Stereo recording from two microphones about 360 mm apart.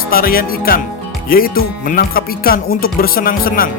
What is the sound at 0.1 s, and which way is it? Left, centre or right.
Music, left.